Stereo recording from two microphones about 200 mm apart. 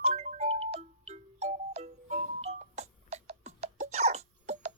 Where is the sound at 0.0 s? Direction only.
30° right (ahead or behind).